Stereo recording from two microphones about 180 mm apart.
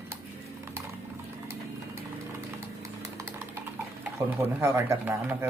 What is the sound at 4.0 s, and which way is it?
Speech, 10° right (ahead or behind).